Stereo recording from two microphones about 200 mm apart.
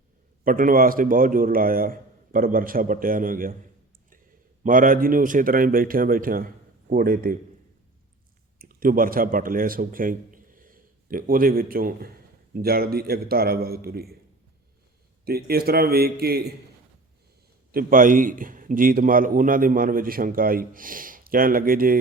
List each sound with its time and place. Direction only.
0.4 s a man's voice: 45° right (ahead or behind)
4.6 s a man's voice: 40° right (ahead or behind)
8.5 s a man's voice: 45° right (ahead or behind)
15.2 s a man's voice: 50° right (ahead or behind)
17.7 s a man's voice: 45° right (ahead or behind)